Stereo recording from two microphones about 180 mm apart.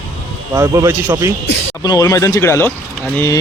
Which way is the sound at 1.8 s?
20° left (ahead or behind).